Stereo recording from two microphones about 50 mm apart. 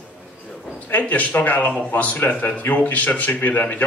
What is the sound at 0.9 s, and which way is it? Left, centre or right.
Speech, left.